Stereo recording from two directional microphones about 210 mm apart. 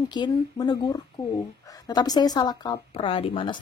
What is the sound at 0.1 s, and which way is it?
A woman's voice, 20° left (ahead or behind).